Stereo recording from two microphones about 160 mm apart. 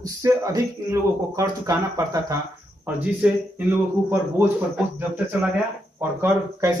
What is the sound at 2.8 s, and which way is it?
Speech, 10° right (ahead or behind).